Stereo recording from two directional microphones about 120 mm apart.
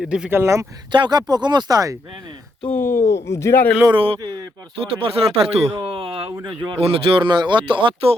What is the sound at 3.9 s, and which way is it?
Speech, 50° right (ahead or behind).